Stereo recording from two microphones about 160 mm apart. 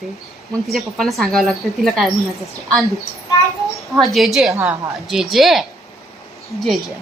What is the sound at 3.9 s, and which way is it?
A woman's voice, centre (ahead or behind).